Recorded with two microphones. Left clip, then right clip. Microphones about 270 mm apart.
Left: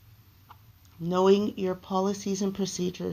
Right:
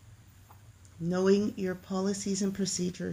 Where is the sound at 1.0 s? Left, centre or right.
Centre.